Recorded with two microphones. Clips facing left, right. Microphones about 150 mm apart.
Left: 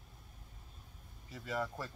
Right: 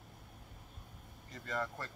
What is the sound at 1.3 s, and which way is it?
Speech, 5° left (ahead or behind).